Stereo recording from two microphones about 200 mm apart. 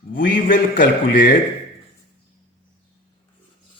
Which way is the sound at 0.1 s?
40° left (ahead or behind).